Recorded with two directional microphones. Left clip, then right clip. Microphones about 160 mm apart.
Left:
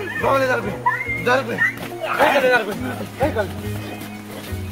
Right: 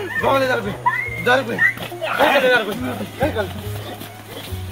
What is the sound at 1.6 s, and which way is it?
Speech, centre (ahead or behind).